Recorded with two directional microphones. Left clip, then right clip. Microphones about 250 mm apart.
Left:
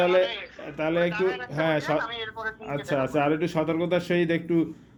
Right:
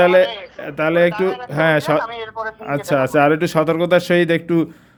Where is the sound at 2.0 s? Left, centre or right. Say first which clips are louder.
Right 7 dB; right.